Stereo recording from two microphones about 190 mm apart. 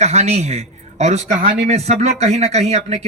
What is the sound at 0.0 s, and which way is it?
A man's voice, 35° right (ahead or behind).